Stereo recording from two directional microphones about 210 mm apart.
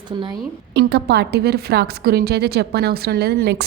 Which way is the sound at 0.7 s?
50° right (ahead or behind).